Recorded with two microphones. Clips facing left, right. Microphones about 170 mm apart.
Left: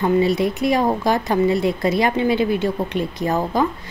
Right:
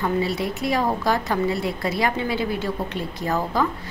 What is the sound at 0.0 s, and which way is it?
A woman's voice, 20° left (ahead or behind).